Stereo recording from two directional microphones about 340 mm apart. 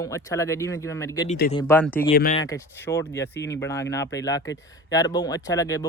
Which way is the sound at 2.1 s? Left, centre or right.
Left.